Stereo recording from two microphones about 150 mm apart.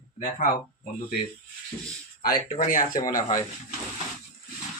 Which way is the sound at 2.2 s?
70° left (ahead or behind).